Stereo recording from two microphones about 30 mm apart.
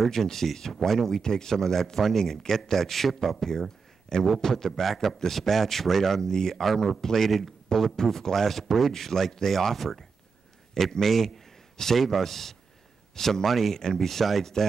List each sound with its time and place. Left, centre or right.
0.1 s speech: centre
1.2 s speech: left
2.7 s a man's voice: centre
6.2 s speech: centre
6.5 s a man's voice: centre
7.0 s speech: centre
7.2 s a man's voice: centre
7.7 s a man's voice: centre